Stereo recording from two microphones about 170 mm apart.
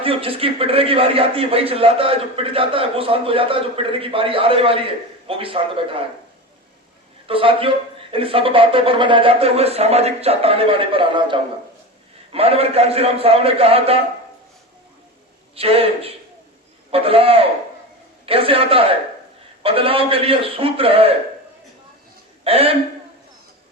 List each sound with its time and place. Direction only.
0.0 s a man's voice: 35° right (ahead or behind)
7.3 s a man's voice: 35° right (ahead or behind)
15.5 s a man's voice: 35° right (ahead or behind)
22.4 s a man's voice: 35° right (ahead or behind)